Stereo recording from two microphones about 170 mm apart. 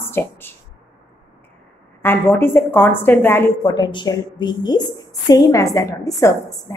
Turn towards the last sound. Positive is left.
turn(degrees=20)  # may be behind; listen again after turning